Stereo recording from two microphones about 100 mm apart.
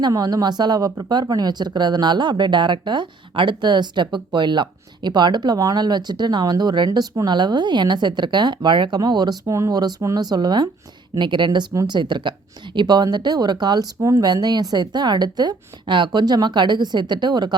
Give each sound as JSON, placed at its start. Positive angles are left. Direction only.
{"t": 0.0, "sound": "speech", "side_deg": -40}